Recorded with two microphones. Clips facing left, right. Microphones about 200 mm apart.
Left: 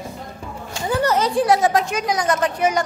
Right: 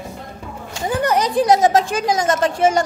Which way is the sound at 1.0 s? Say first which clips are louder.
Right 2 dB; 15° right (ahead or behind).